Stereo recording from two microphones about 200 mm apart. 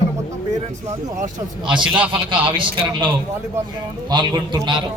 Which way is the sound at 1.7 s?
5° right (ahead or behind).